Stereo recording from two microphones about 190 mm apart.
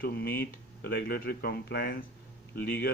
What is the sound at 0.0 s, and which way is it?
Speech, 55° left (ahead or behind).